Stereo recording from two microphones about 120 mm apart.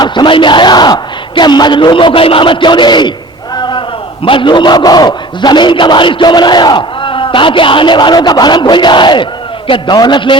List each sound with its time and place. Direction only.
0.0 s a man's voice: 40° left (ahead or behind)